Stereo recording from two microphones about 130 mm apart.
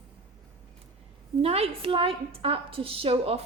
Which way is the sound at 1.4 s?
50° right (ahead or behind).